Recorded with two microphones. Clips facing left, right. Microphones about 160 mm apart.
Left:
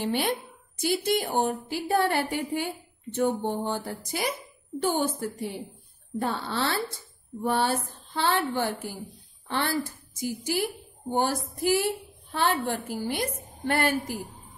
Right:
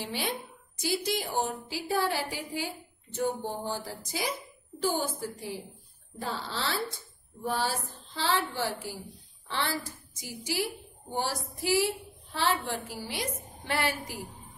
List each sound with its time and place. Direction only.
0.0 s a woman's voice: 60° left (ahead or behind)